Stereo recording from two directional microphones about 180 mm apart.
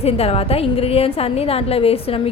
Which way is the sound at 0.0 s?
35° left (ahead or behind).